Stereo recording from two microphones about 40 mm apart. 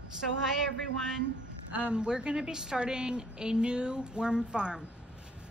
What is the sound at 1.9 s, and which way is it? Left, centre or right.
A woman's voice, right.